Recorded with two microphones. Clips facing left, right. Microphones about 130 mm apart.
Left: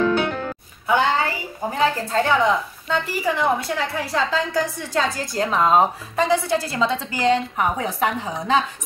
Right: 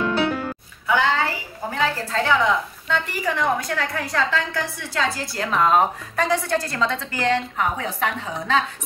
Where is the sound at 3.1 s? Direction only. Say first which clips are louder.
Left 3 dB; 25° left (ahead or behind).